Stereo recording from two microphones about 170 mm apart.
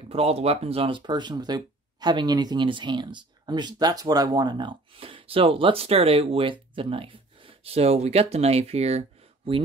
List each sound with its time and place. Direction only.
0.1 s speech: 35° right (ahead or behind)